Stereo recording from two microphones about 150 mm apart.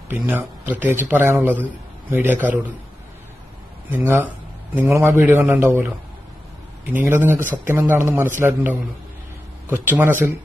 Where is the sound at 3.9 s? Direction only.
15° right (ahead or behind).